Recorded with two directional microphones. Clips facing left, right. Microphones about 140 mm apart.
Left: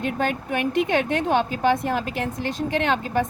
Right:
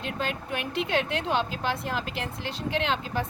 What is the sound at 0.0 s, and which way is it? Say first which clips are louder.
A woman's voice: left 7 dB; 55° left (ahead or behind).